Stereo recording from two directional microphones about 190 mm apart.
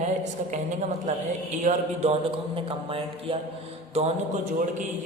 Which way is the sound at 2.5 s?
30° right (ahead or behind).